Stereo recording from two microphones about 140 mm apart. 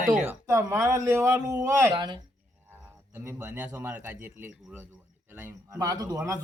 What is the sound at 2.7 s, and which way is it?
Speech, 15° right (ahead or behind).